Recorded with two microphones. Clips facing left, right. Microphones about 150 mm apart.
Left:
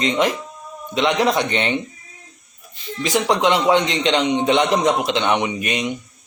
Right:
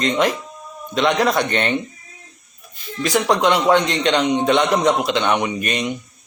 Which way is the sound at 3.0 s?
15° left (ahead or behind).